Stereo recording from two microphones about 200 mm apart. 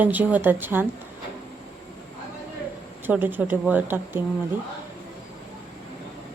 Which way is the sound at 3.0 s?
10° right (ahead or behind).